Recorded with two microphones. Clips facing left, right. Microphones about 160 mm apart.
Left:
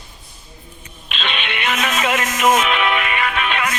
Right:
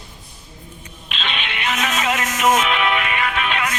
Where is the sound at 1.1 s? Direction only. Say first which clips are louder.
Left 2 dB; 65° left (ahead or behind).